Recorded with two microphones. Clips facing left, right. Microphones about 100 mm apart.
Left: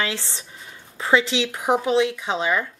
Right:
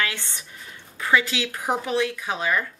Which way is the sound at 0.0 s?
25° left (ahead or behind).